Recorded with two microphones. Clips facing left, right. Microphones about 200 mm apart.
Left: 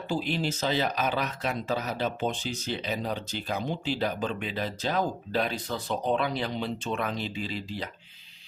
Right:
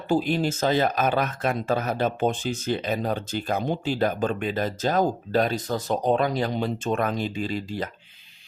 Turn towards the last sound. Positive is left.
turn(degrees=-45)  # may be behind; listen again after turning